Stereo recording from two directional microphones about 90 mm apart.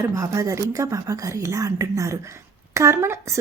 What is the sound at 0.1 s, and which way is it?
Speech, 40° right (ahead or behind).